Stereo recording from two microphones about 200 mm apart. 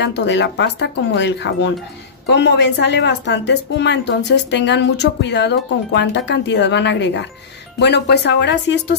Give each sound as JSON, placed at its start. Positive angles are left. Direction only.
{"t": 0.0, "sound": "speech", "side_deg": 60}